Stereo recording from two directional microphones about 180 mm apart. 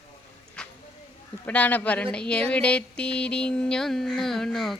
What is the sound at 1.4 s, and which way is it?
Speech, 10° left (ahead or behind).